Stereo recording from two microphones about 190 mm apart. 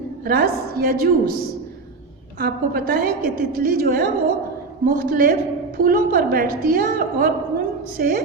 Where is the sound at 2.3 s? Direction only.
55° right (ahead or behind).